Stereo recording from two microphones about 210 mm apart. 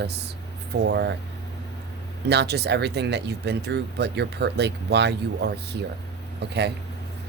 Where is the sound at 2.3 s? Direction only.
50° right (ahead or behind).